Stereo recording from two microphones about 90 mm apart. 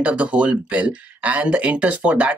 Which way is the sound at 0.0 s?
15° right (ahead or behind).